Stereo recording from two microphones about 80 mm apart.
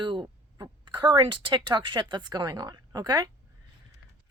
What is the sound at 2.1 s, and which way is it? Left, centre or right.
Speech, right.